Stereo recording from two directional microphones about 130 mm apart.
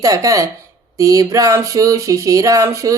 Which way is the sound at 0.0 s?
25° right (ahead or behind).